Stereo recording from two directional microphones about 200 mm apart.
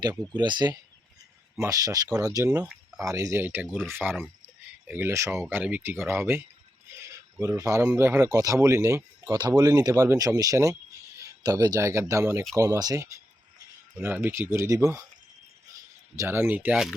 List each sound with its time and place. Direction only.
0.3 s speech: 20° right (ahead or behind)
16.1 s speech: 10° right (ahead or behind)